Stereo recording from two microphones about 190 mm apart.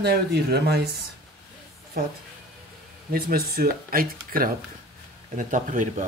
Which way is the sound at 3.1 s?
50° right (ahead or behind).